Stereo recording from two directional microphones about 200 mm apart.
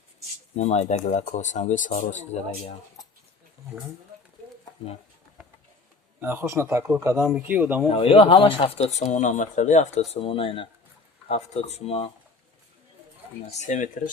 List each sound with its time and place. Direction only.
0.5 s speech: 35° left (ahead or behind)
6.1 s speech: 10° right (ahead or behind)
7.9 s speech: 25° left (ahead or behind)
13.5 s speech: 35° left (ahead or behind)